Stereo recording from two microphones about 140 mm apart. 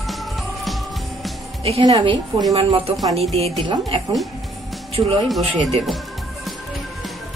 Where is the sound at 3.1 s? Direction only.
45° right (ahead or behind).